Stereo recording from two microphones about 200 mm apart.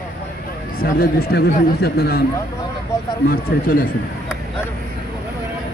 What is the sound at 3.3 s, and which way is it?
Speech, 50° left (ahead or behind).